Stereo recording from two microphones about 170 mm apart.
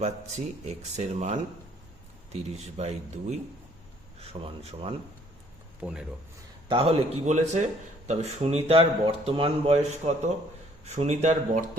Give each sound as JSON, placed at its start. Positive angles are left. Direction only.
{"t": 0.9, "sound": "speech", "side_deg": -40}
{"t": 6.7, "sound": "speech", "side_deg": -30}